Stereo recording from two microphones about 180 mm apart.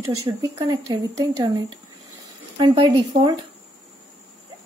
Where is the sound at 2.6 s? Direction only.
25° right (ahead or behind).